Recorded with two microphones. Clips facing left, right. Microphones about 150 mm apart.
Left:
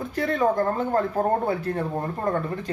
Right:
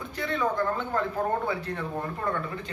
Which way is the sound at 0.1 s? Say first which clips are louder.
Left 6 dB; 45° left (ahead or behind).